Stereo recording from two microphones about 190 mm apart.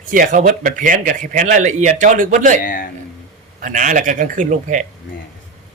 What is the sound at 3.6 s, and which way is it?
A man's voice, 45° right (ahead or behind).